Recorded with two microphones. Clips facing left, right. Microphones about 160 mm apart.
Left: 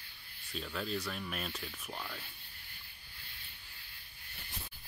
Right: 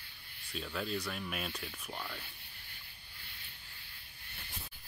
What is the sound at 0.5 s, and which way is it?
Speech, centre (ahead or behind).